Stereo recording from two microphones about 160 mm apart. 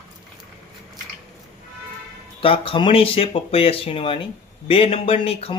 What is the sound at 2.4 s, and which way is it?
Speech, 35° left (ahead or behind).